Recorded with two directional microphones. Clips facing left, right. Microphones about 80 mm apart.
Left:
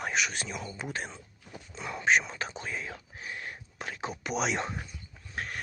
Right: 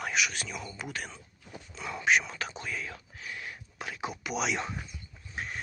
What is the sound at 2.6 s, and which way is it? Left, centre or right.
Whispering, left.